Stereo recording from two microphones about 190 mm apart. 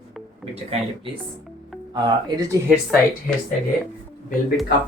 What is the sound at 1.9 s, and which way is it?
Speech, 20° right (ahead or behind).